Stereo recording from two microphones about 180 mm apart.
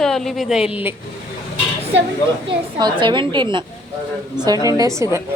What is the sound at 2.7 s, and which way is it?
A woman's voice, 25° right (ahead or behind).